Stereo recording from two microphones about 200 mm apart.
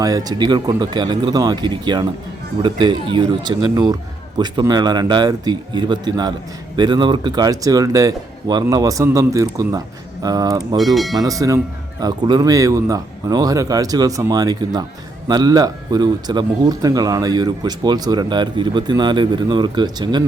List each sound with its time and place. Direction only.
0.0 s a man's voice: 20° right (ahead or behind)
10.8 s speech: centre (ahead or behind)
11.2 s a man's voice: 15° right (ahead or behind)